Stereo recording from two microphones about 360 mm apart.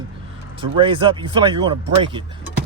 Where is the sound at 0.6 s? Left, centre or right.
Centre.